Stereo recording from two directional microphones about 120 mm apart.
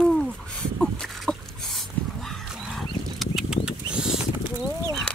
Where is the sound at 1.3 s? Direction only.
10° left (ahead or behind).